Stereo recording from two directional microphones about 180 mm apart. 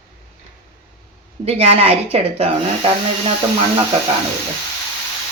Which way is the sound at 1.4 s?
35° right (ahead or behind).